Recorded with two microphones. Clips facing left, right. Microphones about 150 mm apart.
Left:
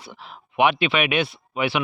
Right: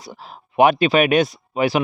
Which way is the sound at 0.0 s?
40° right (ahead or behind).